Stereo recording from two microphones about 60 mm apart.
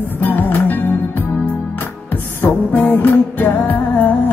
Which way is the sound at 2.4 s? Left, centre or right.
Left.